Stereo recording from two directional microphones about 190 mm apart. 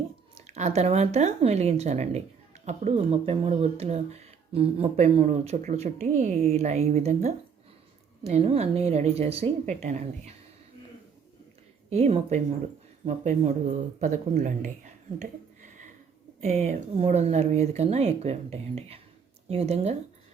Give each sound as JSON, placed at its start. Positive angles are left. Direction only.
{"t": 0.3, "sound": "speech", "side_deg": -35}
{"t": 11.9, "sound": "speech", "side_deg": -35}
{"t": 16.4, "sound": "speech", "side_deg": -35}